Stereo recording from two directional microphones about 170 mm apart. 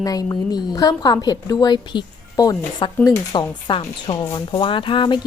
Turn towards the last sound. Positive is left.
turn(degrees=30)  # may be behind; listen again after turning